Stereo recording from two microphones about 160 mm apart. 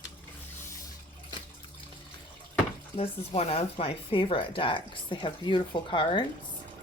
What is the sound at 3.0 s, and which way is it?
Speech, 40° left (ahead or behind).